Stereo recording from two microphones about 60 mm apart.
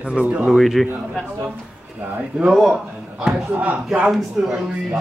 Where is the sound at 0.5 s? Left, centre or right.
Centre.